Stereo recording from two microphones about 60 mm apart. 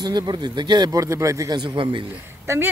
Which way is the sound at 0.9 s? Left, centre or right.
Right.